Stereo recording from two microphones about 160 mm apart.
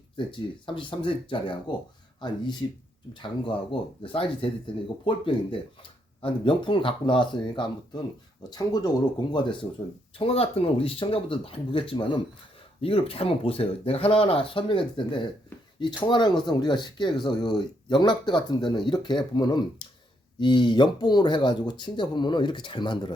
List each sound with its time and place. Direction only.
0.2 s speech: 30° left (ahead or behind)